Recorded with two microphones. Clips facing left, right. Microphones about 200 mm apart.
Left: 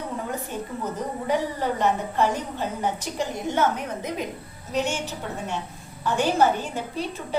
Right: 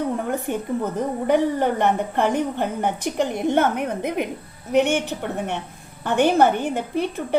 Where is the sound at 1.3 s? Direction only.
60° right (ahead or behind).